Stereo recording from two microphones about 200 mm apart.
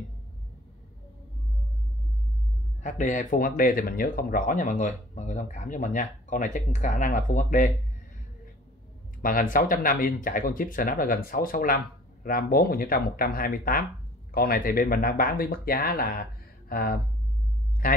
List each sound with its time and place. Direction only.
2.8 s speech: 40° left (ahead or behind)
9.2 s speech: 45° left (ahead or behind)